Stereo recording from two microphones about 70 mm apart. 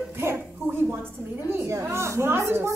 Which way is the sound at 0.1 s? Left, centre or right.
Right.